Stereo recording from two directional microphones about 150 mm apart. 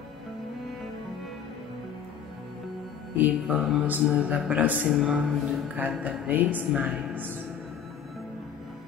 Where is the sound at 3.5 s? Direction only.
10° right (ahead or behind).